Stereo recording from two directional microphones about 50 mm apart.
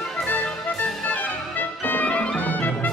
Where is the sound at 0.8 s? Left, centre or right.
Left.